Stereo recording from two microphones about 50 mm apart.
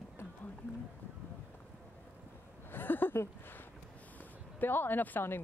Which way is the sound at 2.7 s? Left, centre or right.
Left.